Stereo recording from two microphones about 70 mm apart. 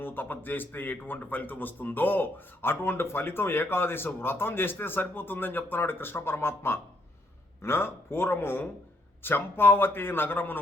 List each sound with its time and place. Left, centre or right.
0.0 s a man's voice: left